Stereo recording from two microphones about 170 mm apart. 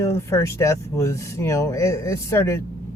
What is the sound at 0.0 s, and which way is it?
Speech, 15° left (ahead or behind).